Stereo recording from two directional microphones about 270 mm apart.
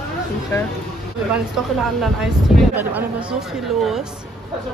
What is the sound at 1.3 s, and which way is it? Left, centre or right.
Speech, centre.